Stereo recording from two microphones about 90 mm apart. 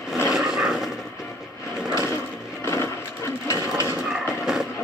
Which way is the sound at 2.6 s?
30° left (ahead or behind).